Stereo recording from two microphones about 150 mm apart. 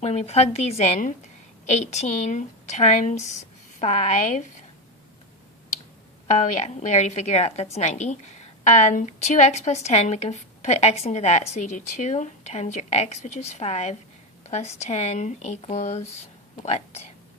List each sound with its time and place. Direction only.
0.0 s a woman's voice: 45° left (ahead or behind)
6.2 s a woman's voice: 55° left (ahead or behind)